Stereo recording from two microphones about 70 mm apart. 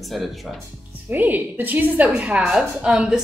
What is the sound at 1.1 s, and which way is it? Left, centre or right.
A woman's voice, right.